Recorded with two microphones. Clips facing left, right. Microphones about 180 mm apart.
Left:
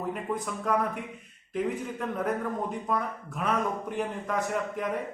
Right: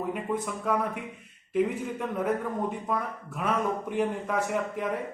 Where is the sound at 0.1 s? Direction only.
5° right (ahead or behind).